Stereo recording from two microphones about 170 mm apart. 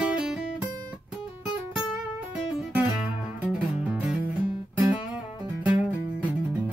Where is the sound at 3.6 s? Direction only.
5° right (ahead or behind).